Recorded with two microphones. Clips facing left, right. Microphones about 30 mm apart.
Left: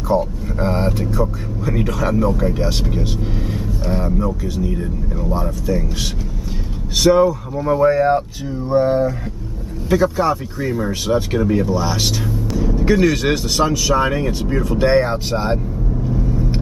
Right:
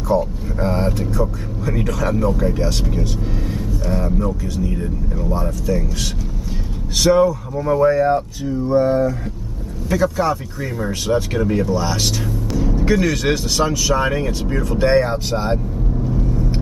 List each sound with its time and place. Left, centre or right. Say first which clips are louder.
0.1 s speech: even; centre
7.0 s speech: left 1 dB; centre
7.9 s speech: left 1 dB; left; by 12.1 s centre
12.4 s music: left 1 dB; centre
12.9 s speech: left 2 dB; centre
16.1 s vehicle: left 2 dB; centre